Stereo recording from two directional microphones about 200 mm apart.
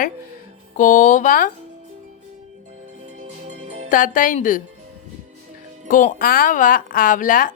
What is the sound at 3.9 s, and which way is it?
Speech, 40° left (ahead or behind).